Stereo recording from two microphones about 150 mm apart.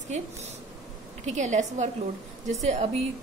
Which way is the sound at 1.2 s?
55° right (ahead or behind).